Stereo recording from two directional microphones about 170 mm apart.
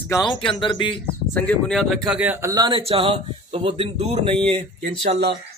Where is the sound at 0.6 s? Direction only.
25° left (ahead or behind).